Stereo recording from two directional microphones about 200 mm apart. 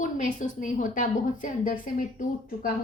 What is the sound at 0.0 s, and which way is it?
A woman's voice, 40° left (ahead or behind).